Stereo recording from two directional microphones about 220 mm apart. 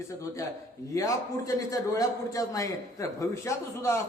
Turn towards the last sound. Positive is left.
turn(degrees=15)  # may be behind; listen again after turning